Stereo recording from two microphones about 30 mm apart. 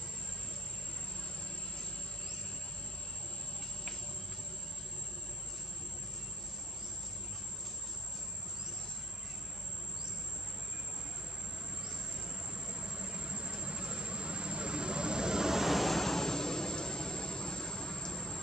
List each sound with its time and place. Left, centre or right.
12.5 s vehicle: right
15.6 s vehicle: centre; by 18.4 s left